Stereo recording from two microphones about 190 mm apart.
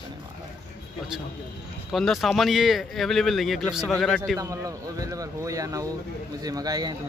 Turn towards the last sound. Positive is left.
turn(degrees=-20)  # may be behind; listen again after turning